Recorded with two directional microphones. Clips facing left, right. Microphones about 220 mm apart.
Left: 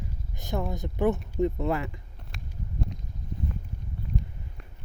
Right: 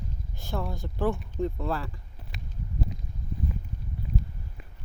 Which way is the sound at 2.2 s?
Centre (ahead or behind).